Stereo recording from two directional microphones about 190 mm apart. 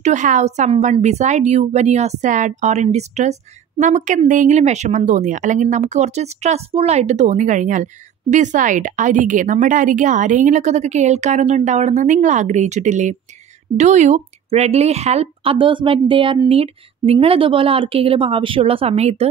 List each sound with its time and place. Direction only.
0.0 s a woman's voice: 40° right (ahead or behind)